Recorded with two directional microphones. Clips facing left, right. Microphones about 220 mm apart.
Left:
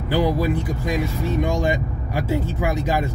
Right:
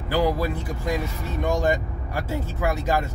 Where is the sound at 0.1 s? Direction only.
15° left (ahead or behind).